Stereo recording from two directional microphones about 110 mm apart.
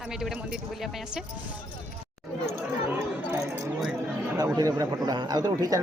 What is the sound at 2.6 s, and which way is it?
Chatter, 20° right (ahead or behind).